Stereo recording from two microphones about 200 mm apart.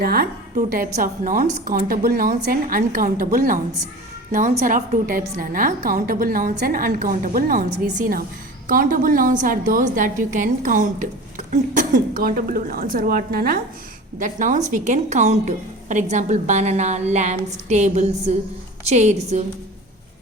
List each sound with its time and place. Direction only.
0.0 s a woman's voice: 50° right (ahead or behind); by 19.4 s 35° right (ahead or behind)